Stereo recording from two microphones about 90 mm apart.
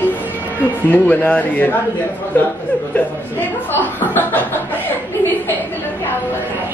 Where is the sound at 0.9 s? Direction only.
20° left (ahead or behind).